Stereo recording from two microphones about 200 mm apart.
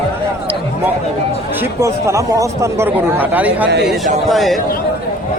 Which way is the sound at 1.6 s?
15° right (ahead or behind).